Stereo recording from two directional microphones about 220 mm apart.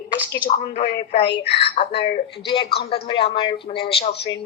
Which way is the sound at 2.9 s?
25° left (ahead or behind).